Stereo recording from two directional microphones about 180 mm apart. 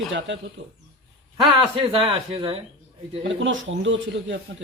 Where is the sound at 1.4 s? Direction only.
25° right (ahead or behind).